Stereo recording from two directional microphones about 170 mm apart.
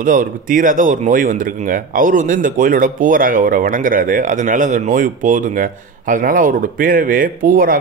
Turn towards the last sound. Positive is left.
turn(degrees=-55)  # may be behind; listen again after turning